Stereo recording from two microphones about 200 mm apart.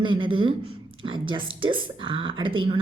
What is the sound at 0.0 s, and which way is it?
A woman's voice, 25° right (ahead or behind).